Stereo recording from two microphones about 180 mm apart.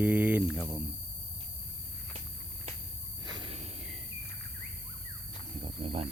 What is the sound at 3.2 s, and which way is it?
Cricket, 25° right (ahead or behind).